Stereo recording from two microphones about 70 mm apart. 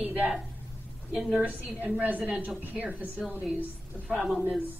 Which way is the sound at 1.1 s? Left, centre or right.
Centre.